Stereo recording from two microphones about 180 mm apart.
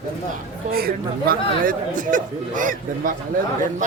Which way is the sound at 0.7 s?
60° right (ahead or behind).